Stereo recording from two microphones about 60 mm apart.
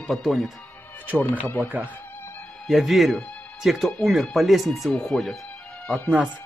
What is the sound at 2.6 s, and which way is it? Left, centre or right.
Speech, centre.